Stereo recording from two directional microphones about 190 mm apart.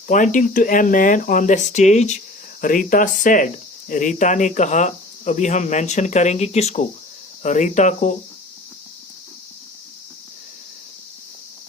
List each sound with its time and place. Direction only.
0.1 s speech: 45° left (ahead or behind)